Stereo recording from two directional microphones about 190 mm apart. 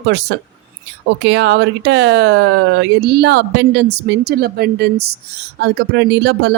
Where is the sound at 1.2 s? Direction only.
65° right (ahead or behind).